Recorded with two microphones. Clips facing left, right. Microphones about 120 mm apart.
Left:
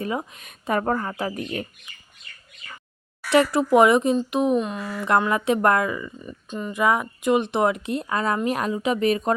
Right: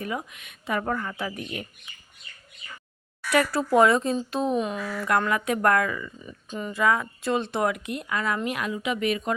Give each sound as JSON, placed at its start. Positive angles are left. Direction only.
{"t": 0.0, "sound": "speech", "side_deg": 30}
{"t": 0.4, "sound": "speech", "side_deg": 45}
{"t": 3.2, "sound": "speech", "side_deg": 20}
{"t": 4.5, "sound": "speech", "side_deg": 0}
{"t": 5.3, "sound": "speech", "side_deg": 25}
{"t": 6.2, "sound": "speech", "side_deg": 0}
{"t": 6.7, "sound": "speech", "side_deg": 20}